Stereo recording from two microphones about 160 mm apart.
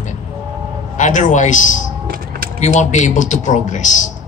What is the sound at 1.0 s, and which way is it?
A man's voice, 50° left (ahead or behind).